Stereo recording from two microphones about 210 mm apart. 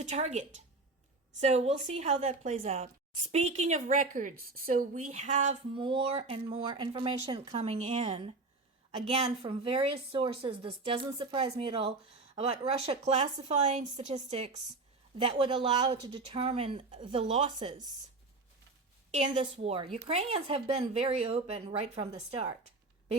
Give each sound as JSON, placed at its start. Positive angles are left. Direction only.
{"t": 0.0, "sound": "a woman's voice", "side_deg": -35}
{"t": 19.1, "sound": "a woman's voice", "side_deg": -30}